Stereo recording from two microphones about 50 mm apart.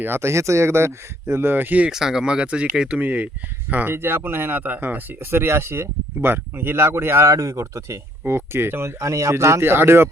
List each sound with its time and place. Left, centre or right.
0.0 s speech: right
1.9 s speech: centre
3.0 s speech: right
3.9 s speech: right
8.3 s speech: right
9.0 s speech: right